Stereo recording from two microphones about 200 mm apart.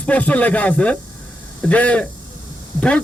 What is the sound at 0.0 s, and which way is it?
A man's voice, 5° left (ahead or behind).